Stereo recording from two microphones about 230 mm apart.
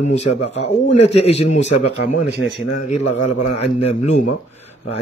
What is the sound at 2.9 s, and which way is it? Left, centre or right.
Speech, left.